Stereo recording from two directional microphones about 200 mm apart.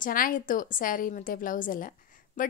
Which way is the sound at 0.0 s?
45° left (ahead or behind).